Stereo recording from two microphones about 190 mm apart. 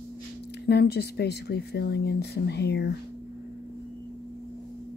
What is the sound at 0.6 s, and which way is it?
Speech, 60° left (ahead or behind).